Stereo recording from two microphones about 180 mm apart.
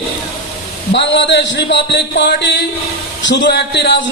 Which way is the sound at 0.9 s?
75° left (ahead or behind).